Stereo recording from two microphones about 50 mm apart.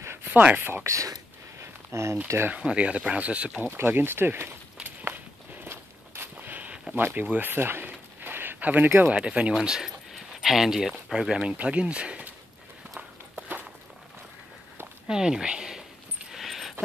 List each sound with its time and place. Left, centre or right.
0.3 s speech: right
0.6 s speech: right
1.6 s a sound: right
2.5 s speech: right
3.7 s speech: right
4.8 s walk: right
6.3 s a sound: right
7.2 s speech: right
9.1 s speech: right; by 11.4 s centre
11.4 s speech: right
15.0 s speech: centre
16.3 s a sound: centre